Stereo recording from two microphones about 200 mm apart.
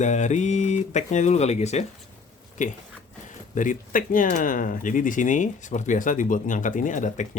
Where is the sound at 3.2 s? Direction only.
40° left (ahead or behind).